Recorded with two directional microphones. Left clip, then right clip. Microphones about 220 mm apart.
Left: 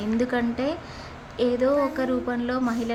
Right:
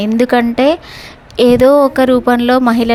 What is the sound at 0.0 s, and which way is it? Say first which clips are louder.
A woman's voice: right 13 dB; 40° right (ahead or behind).